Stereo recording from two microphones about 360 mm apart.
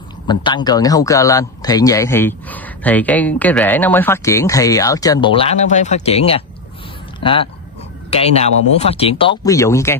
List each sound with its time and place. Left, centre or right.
0.3 s a man's voice: centre